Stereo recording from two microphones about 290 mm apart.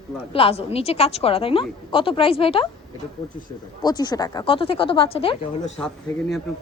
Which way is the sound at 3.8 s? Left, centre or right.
Centre.